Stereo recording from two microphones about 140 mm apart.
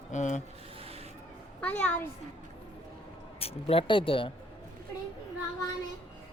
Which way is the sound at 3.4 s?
40° left (ahead or behind).